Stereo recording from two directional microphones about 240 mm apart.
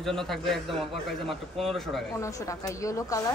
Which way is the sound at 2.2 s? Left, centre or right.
Centre.